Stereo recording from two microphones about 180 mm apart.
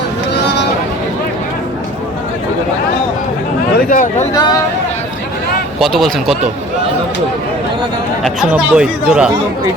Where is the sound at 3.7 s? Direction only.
45° left (ahead or behind).